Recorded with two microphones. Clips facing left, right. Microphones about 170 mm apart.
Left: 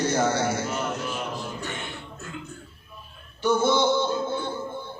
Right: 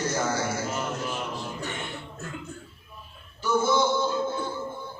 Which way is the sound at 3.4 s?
70° left (ahead or behind).